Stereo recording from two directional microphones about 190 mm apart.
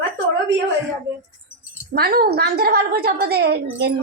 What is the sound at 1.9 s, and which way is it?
A woman's voice, 50° right (ahead or behind).